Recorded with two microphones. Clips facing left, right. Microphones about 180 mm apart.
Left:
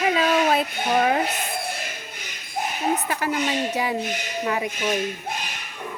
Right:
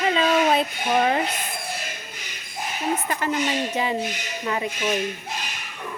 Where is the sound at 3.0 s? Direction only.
5° left (ahead or behind).